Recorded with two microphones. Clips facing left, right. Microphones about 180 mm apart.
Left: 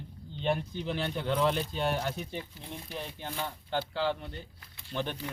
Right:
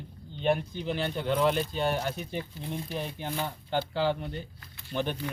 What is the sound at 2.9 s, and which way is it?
Speech, 15° right (ahead or behind).